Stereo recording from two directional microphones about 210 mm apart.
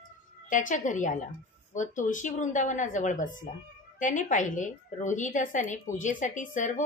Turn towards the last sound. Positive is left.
turn(degrees=35)  # may be behind; listen again after turning